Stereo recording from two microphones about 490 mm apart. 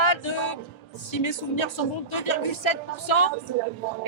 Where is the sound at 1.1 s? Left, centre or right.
Left.